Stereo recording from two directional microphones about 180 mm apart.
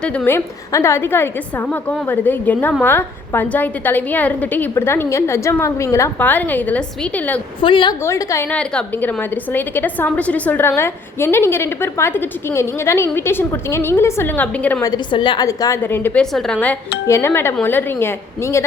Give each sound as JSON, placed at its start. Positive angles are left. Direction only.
{"t": 0.0, "sound": "a woman's voice", "side_deg": 5}
{"t": 7.6, "sound": "a woman's voice", "side_deg": 25}
{"t": 8.0, "sound": "a woman's voice", "side_deg": 15}
{"t": 14.8, "sound": "a woman's voice", "side_deg": 25}